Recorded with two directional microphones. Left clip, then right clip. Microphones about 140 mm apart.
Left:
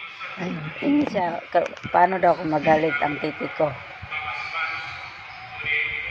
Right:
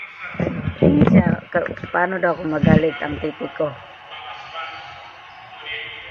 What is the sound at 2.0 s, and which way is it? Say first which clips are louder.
Speech: left 2 dB; 5° right (ahead or behind).